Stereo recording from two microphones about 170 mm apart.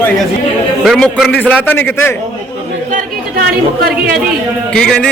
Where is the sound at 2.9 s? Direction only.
60° right (ahead or behind).